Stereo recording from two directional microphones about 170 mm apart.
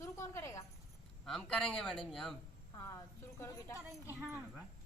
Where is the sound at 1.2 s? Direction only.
5° left (ahead or behind).